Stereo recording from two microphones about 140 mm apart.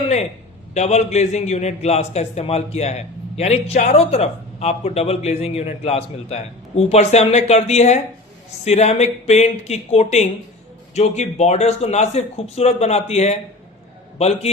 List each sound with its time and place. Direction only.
0.7 s a man's voice: 55° left (ahead or behind)